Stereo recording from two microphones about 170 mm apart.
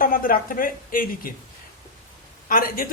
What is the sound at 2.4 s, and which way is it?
Speech, 55° left (ahead or behind).